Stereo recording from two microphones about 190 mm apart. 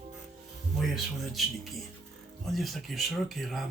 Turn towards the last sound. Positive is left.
turn(degrees=0)  # may be behind; listen again after turning